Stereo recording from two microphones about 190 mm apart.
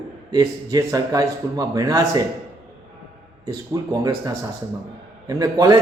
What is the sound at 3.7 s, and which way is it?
A man's voice, 20° right (ahead or behind).